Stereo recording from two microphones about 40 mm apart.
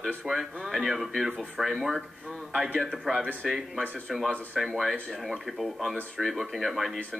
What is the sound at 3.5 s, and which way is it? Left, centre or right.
Speech, centre.